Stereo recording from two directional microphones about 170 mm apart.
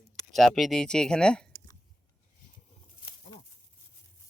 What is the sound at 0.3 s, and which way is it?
Speech, centre (ahead or behind).